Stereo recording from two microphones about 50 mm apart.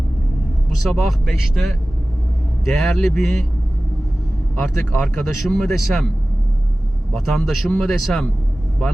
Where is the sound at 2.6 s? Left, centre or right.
Centre.